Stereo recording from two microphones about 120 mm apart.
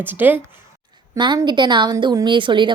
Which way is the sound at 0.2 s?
15° right (ahead or behind).